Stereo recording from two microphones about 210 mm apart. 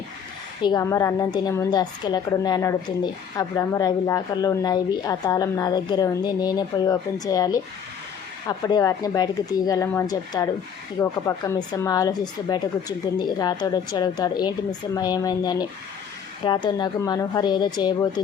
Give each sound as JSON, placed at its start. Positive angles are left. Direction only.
{"t": 0.6, "sound": "a woman's voice", "side_deg": 15}